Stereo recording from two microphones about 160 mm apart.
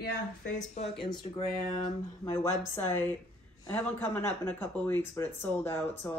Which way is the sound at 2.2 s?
15° left (ahead or behind).